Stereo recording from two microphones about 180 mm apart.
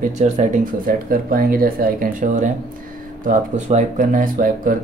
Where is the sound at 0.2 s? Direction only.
40° right (ahead or behind).